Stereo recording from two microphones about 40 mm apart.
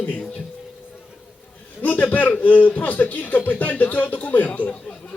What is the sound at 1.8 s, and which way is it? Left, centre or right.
A man's voice, left.